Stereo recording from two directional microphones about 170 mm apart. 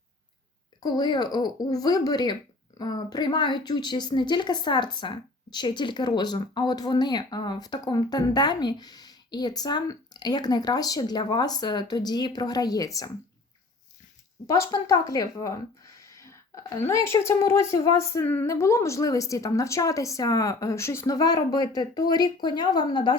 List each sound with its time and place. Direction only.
0.8 s a woman's voice: 25° left (ahead or behind)
14.4 s a woman's voice: 20° left (ahead or behind)